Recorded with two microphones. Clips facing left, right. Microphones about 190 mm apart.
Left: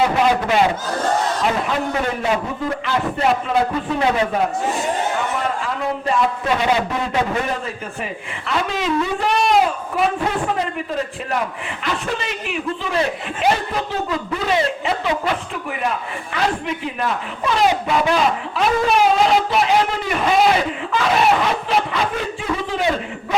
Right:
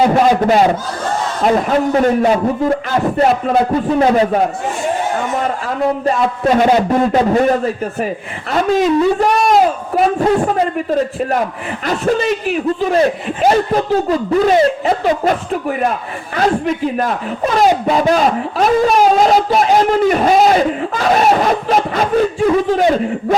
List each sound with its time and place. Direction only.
0.0 s a man's voice: 40° right (ahead or behind)
6.1 s speech: 40° right (ahead or behind)